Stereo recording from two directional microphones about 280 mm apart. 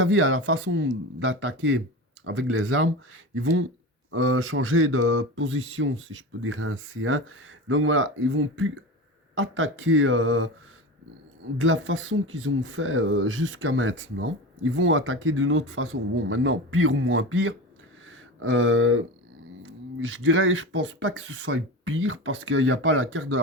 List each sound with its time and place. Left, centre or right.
0.0 s speech: right
11.5 s speech: right
18.0 s a sound: right
19.6 s speech: right